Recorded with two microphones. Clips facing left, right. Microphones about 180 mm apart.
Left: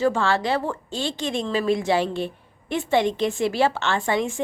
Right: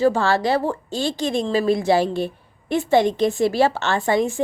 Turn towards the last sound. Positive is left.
turn(degrees=-40)  # may be behind; listen again after turning